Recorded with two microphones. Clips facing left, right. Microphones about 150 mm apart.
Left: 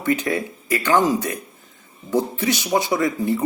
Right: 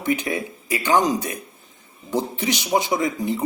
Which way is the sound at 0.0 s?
15° right (ahead or behind).